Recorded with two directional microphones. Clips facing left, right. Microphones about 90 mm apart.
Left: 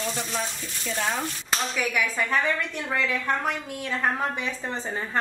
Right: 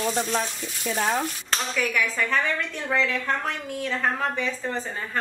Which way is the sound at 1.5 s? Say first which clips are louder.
Even; 10° left (ahead or behind).